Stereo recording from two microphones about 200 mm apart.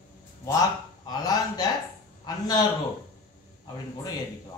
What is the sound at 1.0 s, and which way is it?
A man's voice, 20° left (ahead or behind).